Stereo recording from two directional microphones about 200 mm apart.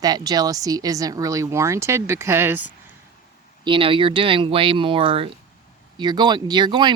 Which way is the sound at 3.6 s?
25° right (ahead or behind).